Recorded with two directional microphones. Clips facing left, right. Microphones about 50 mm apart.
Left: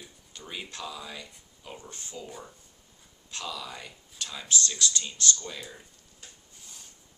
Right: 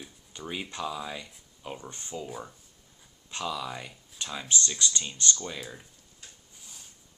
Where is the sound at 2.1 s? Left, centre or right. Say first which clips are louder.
Right 5 dB; centre.